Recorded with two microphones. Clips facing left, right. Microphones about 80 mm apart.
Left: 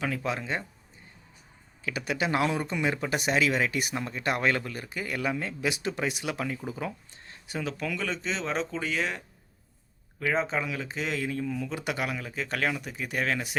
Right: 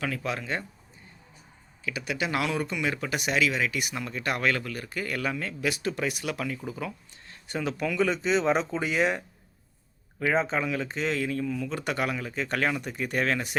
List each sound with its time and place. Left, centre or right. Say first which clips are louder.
0.0 s speech: left 1 dB; left
1.8 s speech: left 1 dB; left
7.4 s speech: right 3 dB; centre
10.2 s speech: right 2 dB; centre
10.4 s speech: right 3 dB; centre